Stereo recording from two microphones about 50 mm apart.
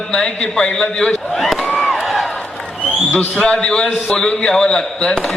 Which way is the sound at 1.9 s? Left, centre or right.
Centre.